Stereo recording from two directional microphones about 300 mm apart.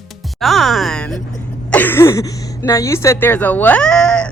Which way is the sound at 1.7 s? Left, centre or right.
Centre.